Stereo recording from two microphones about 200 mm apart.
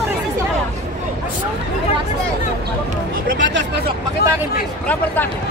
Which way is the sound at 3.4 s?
65° right (ahead or behind).